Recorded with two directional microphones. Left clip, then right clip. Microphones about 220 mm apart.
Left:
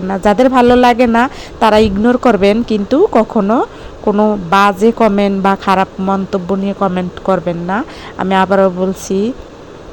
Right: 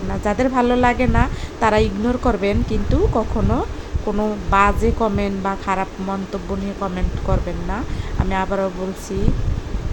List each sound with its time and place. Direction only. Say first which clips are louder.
0.1 s speech: left 10 dB; 25° left (ahead or behind)